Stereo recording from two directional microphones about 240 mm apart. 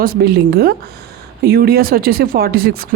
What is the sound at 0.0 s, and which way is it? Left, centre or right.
Speech, right.